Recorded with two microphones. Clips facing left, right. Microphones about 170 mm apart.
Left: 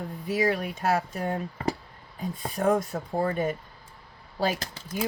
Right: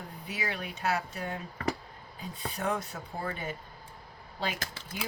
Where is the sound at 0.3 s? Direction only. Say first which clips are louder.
Left 11 dB; 45° left (ahead or behind).